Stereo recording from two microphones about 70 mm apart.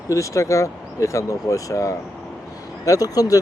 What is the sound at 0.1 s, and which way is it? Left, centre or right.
Speech, left.